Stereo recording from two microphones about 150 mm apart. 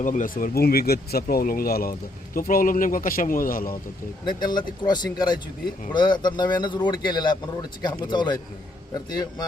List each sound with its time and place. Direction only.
0.0 s speech: 60° left (ahead or behind)
4.3 s a man's voice: 30° left (ahead or behind)